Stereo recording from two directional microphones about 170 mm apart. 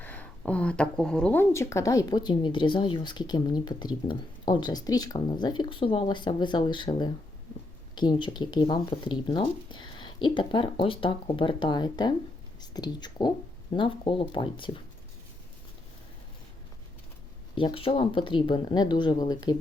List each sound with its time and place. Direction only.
0.0 s a woman's voice: 10° left (ahead or behind); by 14.8 s 30° left (ahead or behind)
17.5 s a woman's voice: 30° left (ahead or behind)